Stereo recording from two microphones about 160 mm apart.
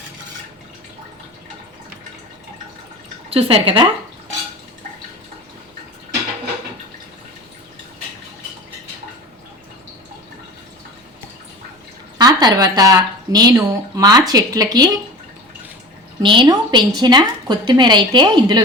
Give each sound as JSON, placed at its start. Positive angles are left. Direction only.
{"t": 3.2, "sound": "speech", "side_deg": -35}
{"t": 12.1, "sound": "speech", "side_deg": -25}
{"t": 16.2, "sound": "speech", "side_deg": -30}